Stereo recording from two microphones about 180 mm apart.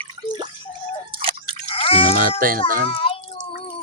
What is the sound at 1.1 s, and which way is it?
Drip, 30° right (ahead or behind).